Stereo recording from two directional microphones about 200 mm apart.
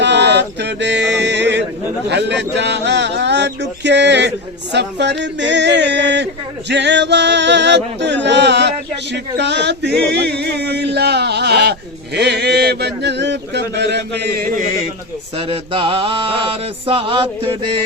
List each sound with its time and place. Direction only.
0.0 s music: 60° right (ahead or behind)
2.0 s a sound: 60° right (ahead or behind)
15.4 s mantra: 25° right (ahead or behind)